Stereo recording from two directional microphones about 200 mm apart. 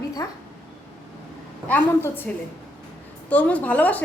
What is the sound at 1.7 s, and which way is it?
Speech, 10° left (ahead or behind).